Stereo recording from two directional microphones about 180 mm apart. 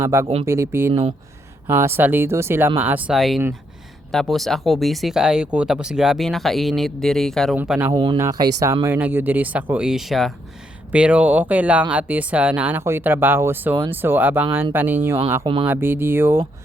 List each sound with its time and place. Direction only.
0.0 s speech: 15° right (ahead or behind); by 7.5 s centre (ahead or behind)
7.5 s speech: 10° right (ahead or behind)
7.9 s speech: 25° right (ahead or behind)